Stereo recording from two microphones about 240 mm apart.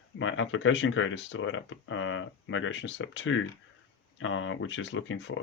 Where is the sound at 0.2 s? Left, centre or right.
Left.